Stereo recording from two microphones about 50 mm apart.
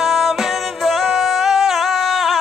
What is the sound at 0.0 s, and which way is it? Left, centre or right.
Music, centre.